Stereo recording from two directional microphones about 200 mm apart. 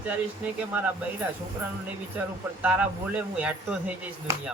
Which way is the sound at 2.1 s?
5° right (ahead or behind).